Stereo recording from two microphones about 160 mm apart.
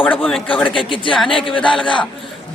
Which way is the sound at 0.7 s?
30° left (ahead or behind).